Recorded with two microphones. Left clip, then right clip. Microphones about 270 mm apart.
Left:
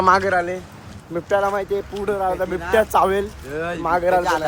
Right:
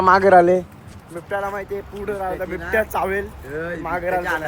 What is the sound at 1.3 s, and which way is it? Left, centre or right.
Speech, left.